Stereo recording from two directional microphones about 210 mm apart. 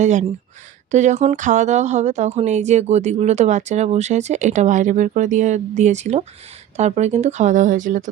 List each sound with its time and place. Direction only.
0.0 s a woman's voice: 35° right (ahead or behind)